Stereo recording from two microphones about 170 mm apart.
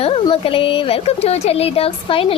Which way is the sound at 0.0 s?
35° left (ahead or behind).